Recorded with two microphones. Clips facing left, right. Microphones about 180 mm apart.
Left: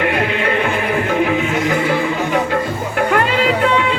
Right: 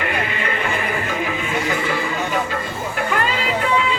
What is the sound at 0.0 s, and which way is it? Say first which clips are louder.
Music: left 6 dB; 60° left (ahead or behind).